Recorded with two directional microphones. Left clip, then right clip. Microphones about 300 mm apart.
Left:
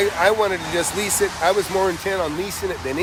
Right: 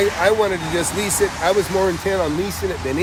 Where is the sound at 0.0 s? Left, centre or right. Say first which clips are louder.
Right 1 dB; centre.